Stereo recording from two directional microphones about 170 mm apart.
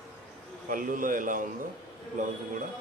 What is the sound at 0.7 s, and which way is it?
Speech, 55° right (ahead or behind).